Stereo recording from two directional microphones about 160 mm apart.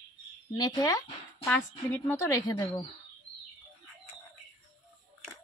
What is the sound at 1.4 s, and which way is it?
A woman's voice, 10° left (ahead or behind).